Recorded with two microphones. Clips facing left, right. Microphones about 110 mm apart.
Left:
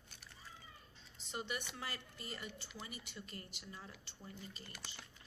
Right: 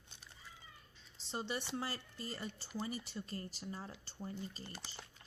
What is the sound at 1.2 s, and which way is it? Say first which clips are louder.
Speech: right 3 dB; 30° right (ahead or behind).